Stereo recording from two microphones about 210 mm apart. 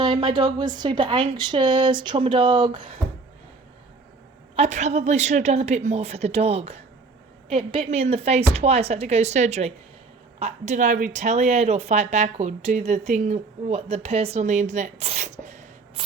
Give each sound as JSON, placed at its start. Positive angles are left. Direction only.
{"t": 0.0, "sound": "a woman's voice", "side_deg": -25}
{"t": 4.5, "sound": "speech", "side_deg": -30}